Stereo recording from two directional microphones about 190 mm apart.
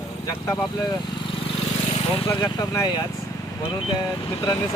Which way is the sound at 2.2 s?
15° left (ahead or behind).